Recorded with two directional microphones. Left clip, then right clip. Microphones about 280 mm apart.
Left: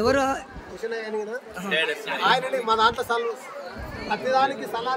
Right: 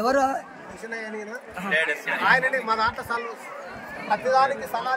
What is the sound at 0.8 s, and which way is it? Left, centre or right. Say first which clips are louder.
A man's voice: left 4 dB; centre.